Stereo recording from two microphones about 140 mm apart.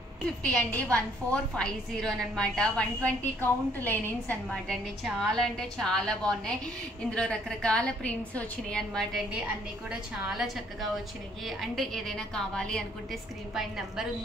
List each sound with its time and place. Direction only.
0.4 s a woman's voice: 10° left (ahead or behind)